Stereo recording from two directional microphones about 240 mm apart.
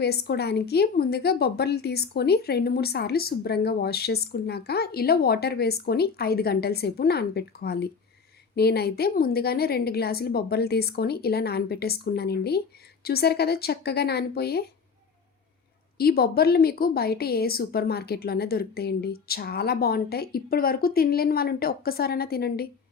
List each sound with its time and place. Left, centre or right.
0.0 s a woman's voice: left
16.0 s a woman's voice: left